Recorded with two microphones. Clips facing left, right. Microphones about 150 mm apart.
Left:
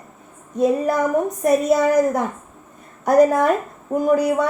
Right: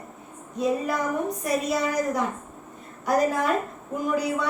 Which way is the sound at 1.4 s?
50° left (ahead or behind).